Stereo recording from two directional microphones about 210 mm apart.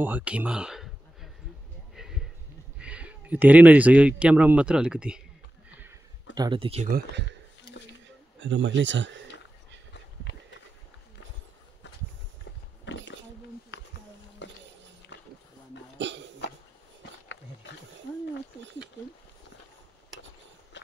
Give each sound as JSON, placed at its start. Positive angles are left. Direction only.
{"t": 0.0, "sound": "speech", "side_deg": -5}
{"t": 2.0, "sound": "a sound", "side_deg": 0}
{"t": 2.8, "sound": "speech", "side_deg": -5}
{"t": 6.3, "sound": "speech", "side_deg": -20}
{"t": 8.4, "sound": "speech", "side_deg": -60}
{"t": 12.8, "sound": "a sound", "side_deg": 60}
{"t": 14.4, "sound": "a sound", "side_deg": 60}
{"t": 16.0, "sound": "hiccup", "side_deg": -60}
{"t": 20.7, "sound": "horse", "side_deg": 55}